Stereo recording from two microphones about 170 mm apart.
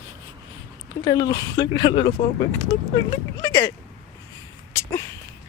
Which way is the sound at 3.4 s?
20° left (ahead or behind).